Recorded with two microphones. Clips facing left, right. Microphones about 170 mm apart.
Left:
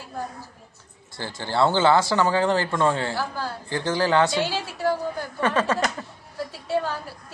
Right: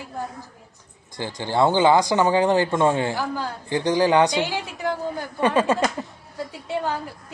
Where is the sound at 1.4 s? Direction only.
15° right (ahead or behind).